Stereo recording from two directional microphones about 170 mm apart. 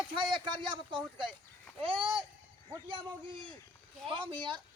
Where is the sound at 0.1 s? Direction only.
30° right (ahead or behind).